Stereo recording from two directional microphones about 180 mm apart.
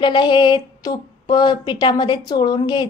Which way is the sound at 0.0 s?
25° left (ahead or behind).